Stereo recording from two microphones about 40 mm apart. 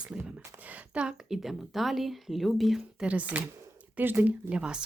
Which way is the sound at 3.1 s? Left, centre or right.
Right.